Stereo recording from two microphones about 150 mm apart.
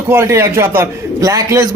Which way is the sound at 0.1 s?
15° right (ahead or behind).